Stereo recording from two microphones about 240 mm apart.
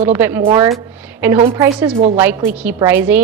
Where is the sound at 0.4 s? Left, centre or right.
Centre.